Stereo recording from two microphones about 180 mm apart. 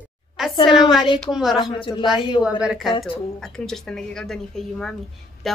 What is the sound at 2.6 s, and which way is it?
Speech, 5° right (ahead or behind).